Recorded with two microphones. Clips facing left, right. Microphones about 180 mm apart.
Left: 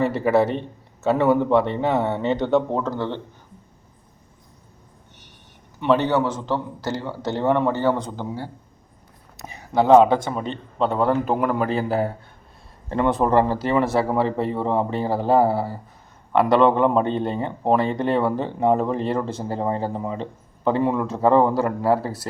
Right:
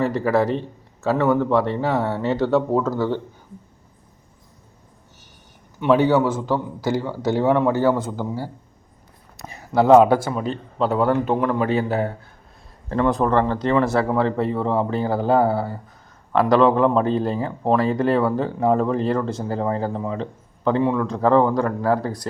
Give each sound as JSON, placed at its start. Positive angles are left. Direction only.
{"t": 0.0, "sound": "a man's voice", "side_deg": 5}
{"t": 1.9, "sound": "speech", "side_deg": 20}
{"t": 2.1, "sound": "a man's voice", "side_deg": -5}
{"t": 5.8, "sound": "a man's voice", "side_deg": -10}
{"t": 9.7, "sound": "a man's voice", "side_deg": -5}